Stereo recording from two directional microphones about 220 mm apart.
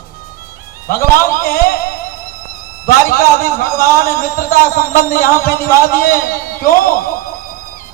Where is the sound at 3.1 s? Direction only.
40° left (ahead or behind).